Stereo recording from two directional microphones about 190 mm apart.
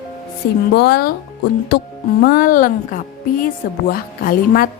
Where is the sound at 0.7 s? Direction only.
60° left (ahead or behind).